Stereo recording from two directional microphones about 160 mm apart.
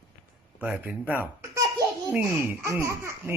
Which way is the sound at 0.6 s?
10° right (ahead or behind).